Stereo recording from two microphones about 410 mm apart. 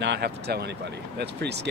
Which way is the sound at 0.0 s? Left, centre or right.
Right.